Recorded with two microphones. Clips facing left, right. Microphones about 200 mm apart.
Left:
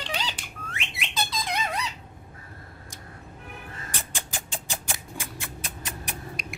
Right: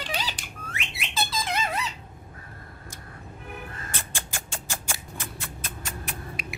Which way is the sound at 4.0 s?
15° left (ahead or behind).